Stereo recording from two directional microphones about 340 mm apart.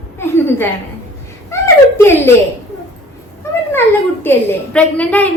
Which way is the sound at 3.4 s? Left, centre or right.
Centre.